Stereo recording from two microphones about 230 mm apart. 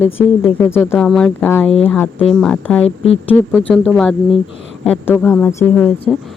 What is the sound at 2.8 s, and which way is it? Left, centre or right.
Speech, left.